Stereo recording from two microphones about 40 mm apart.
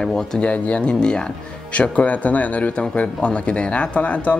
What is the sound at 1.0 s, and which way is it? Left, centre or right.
Speech, left.